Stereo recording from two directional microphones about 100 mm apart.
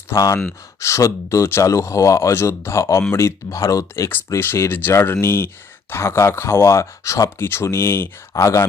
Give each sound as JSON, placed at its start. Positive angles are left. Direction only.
{"t": 0.1, "sound": "speech", "side_deg": 35}